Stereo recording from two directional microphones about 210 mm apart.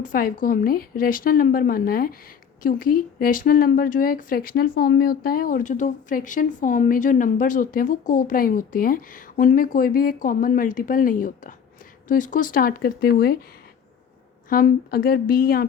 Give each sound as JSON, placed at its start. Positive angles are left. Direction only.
{"t": 0.0, "sound": "speech", "side_deg": 40}
{"t": 14.5, "sound": "speech", "side_deg": 45}